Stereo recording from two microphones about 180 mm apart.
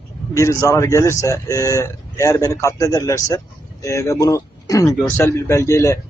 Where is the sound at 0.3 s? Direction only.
15° left (ahead or behind).